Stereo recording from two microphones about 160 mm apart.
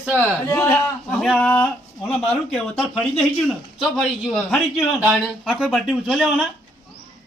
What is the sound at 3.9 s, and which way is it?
A man's voice, centre (ahead or behind).